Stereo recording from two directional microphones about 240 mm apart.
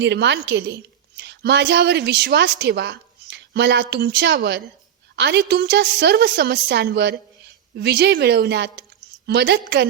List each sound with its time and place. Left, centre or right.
0.0 s a woman's voice: right